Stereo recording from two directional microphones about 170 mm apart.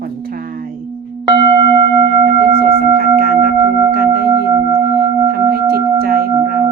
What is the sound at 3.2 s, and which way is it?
Singing bowl, 60° right (ahead or behind).